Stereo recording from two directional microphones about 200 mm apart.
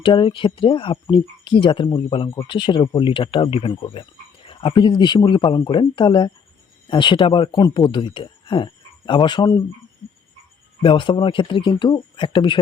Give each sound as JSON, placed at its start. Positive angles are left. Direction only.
{"t": 0.0, "sound": "speech", "side_deg": 25}
{"t": 10.8, "sound": "speech", "side_deg": 25}